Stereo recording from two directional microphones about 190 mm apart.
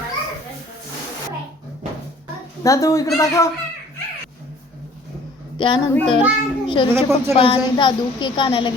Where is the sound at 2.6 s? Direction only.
15° left (ahead or behind).